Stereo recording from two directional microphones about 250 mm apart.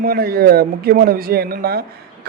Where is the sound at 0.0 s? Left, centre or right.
Right.